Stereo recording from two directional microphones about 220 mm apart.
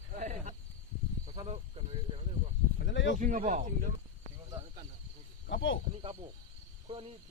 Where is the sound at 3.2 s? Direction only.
35° right (ahead or behind).